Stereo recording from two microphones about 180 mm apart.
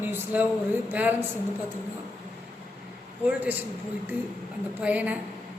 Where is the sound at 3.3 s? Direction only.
10° right (ahead or behind).